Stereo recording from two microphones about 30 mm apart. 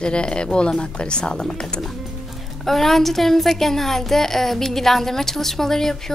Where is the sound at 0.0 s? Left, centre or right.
Left.